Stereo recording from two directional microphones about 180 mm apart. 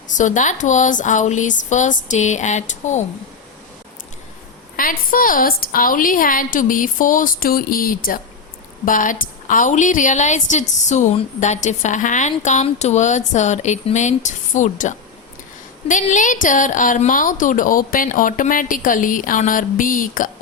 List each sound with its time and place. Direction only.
0.2 s a woman's voice: 45° left (ahead or behind)
4.8 s a woman's voice: 50° left (ahead or behind)